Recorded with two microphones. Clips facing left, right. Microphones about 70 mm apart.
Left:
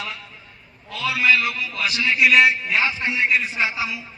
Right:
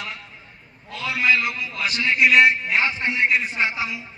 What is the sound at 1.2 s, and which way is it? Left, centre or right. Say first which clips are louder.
Speech: left 1 dB; centre.